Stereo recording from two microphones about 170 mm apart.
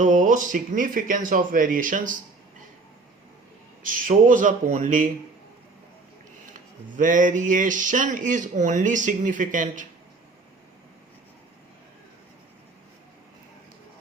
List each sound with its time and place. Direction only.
0.0 s speech: 45° right (ahead or behind)
3.8 s speech: 50° right (ahead or behind)
6.4 s speech: 50° right (ahead or behind)